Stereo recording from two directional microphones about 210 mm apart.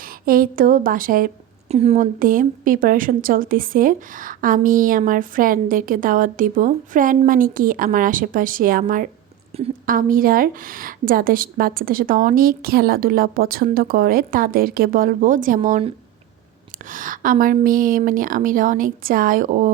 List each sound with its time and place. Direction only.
0.0 s a woman's voice: 45° right (ahead or behind)